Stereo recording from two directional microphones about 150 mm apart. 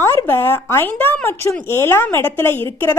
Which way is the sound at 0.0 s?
15° left (ahead or behind).